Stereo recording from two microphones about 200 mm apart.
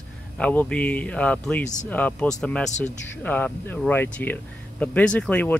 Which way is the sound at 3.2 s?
10° left (ahead or behind).